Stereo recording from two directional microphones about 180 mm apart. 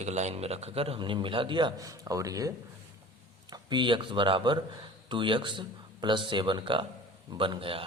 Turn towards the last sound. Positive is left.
turn(degrees=-30)  # may be behind; listen again after turning